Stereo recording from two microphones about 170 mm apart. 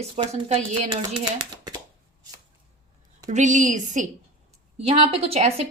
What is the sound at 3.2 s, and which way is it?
Speech, 45° right (ahead or behind).